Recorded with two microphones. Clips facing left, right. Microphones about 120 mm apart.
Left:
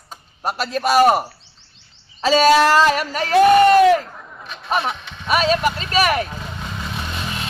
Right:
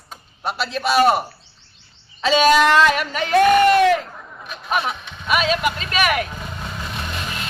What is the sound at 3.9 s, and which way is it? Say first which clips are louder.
Chatter: left 2 dB; centre (ahead or behind).